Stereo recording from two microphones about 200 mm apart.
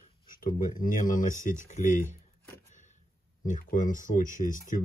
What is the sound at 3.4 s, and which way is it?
Speech, 40° left (ahead or behind).